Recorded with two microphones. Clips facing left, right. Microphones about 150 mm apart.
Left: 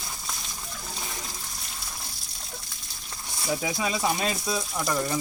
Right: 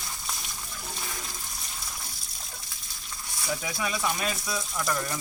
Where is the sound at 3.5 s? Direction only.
20° left (ahead or behind).